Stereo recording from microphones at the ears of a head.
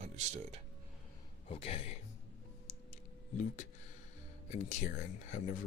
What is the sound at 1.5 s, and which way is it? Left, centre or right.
Speech, left.